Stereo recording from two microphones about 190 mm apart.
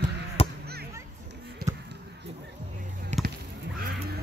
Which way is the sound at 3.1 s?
35° right (ahead or behind).